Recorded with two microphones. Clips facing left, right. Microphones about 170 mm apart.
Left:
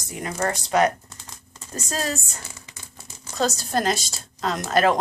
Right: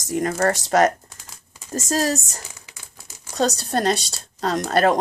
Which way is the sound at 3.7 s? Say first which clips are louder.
Right 2 dB; 35° right (ahead or behind).